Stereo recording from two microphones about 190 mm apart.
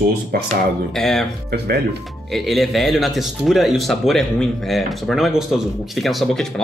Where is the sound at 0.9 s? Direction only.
Centre (ahead or behind).